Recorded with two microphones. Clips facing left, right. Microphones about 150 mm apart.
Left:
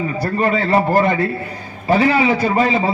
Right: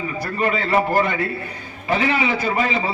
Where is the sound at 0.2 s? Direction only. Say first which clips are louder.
Left 4 dB; 35° left (ahead or behind).